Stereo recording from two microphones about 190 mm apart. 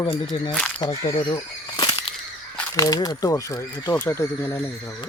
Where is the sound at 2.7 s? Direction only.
20° left (ahead or behind).